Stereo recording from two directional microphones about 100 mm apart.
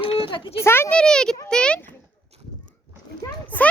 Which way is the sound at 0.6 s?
25° left (ahead or behind).